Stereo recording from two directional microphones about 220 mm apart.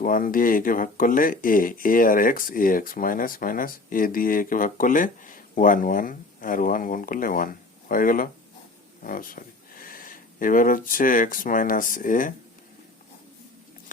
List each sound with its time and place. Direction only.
0.0 s speech: 40° left (ahead or behind)